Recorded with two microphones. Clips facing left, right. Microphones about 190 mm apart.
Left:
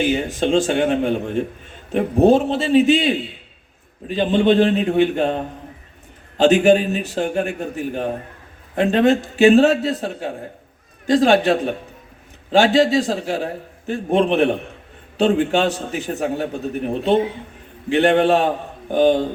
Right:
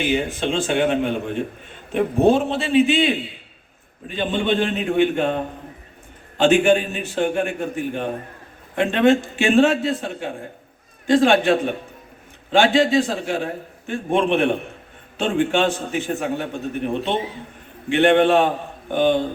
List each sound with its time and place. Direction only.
0.0 s a man's voice: 40° left (ahead or behind)